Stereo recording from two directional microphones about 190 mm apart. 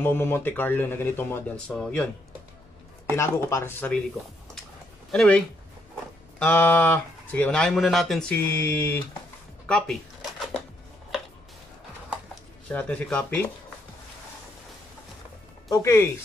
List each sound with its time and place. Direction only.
0.0 s speech: 10° left (ahead or behind)
3.2 s speech: 15° left (ahead or behind)
5.1 s speech: 5° left (ahead or behind)
6.4 s speech: 10° left (ahead or behind)
12.7 s speech: 10° left (ahead or behind)
15.7 s speech: 15° left (ahead or behind)